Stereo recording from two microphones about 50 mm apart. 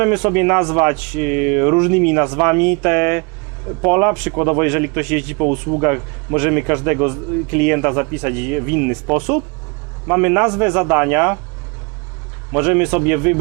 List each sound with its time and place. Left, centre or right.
0.0 s a man's voice: right
12.5 s a man's voice: right